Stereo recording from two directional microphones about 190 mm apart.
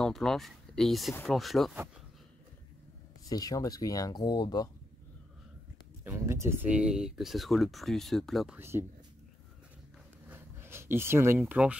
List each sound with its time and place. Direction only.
0.0 s speech: centre (ahead or behind)
3.3 s speech: 20° left (ahead or behind)
6.0 s speech: 15° right (ahead or behind)
8.5 s speech: 10° right (ahead or behind)
10.2 s a sound: 10° right (ahead or behind)
11.3 s speech: 5° right (ahead or behind)